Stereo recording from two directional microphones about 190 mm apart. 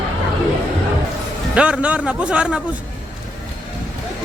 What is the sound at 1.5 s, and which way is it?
A man's voice, 5° right (ahead or behind).